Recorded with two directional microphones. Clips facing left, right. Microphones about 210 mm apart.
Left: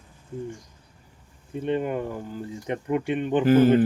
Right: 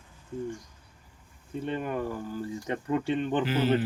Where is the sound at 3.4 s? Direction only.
50° left (ahead or behind).